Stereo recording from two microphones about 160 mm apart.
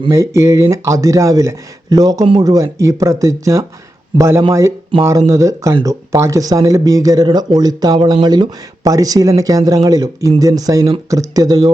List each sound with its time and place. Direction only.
0.1 s speech: 20° right (ahead or behind)